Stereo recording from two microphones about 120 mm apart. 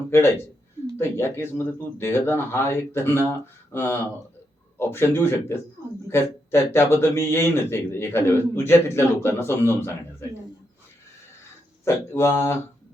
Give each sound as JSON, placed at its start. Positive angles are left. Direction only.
{"t": 0.9, "sound": "a man's voice", "side_deg": 20}
{"t": 11.9, "sound": "a man's voice", "side_deg": 20}